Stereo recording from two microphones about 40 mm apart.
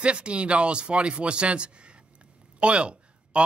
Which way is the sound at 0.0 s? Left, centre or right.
Right.